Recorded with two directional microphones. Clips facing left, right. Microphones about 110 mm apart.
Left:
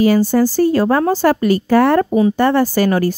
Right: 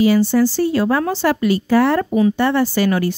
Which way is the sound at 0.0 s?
45° left (ahead or behind).